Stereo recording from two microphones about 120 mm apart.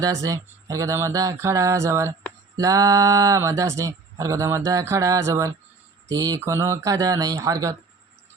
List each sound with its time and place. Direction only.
0.0 s speech: 30° right (ahead or behind)